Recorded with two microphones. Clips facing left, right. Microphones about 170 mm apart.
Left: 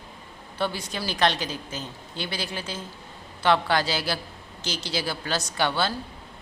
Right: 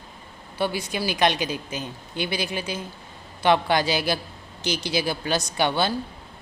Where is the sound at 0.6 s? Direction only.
10° right (ahead or behind).